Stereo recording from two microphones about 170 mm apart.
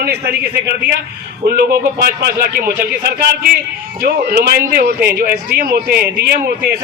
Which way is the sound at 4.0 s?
65° right (ahead or behind).